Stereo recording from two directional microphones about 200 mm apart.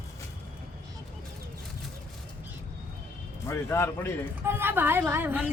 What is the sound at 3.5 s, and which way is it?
Speech, 15° left (ahead or behind).